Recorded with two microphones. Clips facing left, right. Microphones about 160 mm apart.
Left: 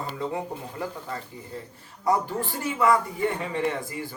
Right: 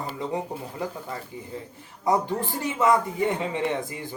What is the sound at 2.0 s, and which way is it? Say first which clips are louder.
A man's voice: right 1 dB; 20° right (ahead or behind).